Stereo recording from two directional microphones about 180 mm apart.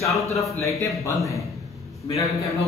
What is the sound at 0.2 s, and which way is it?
Speech, 15° left (ahead or behind).